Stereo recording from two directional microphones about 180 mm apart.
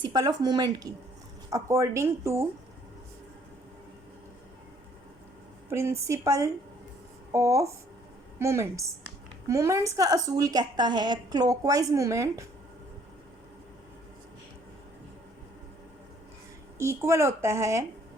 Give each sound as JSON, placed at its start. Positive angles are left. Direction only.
{"t": 0.0, "sound": "a woman's voice", "side_deg": -20}
{"t": 5.7, "sound": "a woman's voice", "side_deg": -15}
{"t": 16.7, "sound": "a woman's voice", "side_deg": -15}